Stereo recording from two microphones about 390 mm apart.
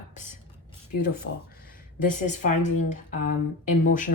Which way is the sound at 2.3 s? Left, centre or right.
Centre.